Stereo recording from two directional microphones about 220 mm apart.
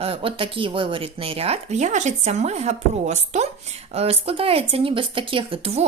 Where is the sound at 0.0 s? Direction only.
25° right (ahead or behind).